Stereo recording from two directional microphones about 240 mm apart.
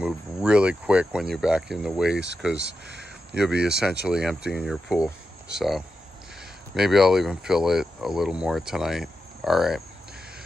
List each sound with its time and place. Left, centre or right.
0.0 s speech: centre
2.1 s speech: right
3.3 s speech: centre